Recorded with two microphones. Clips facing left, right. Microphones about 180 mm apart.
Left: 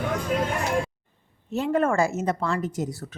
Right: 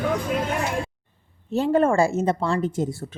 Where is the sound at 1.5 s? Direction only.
30° right (ahead or behind).